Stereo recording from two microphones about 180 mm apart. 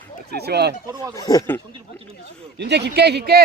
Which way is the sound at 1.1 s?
20° left (ahead or behind).